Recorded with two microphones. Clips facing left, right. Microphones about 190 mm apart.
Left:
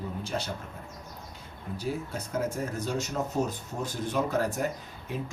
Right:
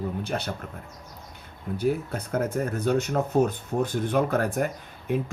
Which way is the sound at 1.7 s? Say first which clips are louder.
Right 7 dB; 60° right (ahead or behind).